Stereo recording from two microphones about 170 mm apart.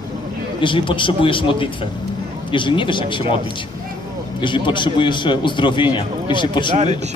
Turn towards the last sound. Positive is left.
turn(degrees=30)  # may be behind; listen again after turning